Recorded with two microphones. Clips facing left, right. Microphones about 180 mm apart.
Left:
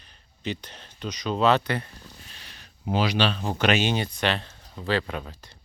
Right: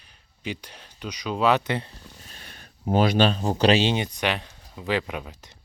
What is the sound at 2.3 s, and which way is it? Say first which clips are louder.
Speech: right 3 dB; 50° right (ahead or behind).